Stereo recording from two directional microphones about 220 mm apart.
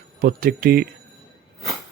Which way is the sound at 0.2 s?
40° right (ahead or behind).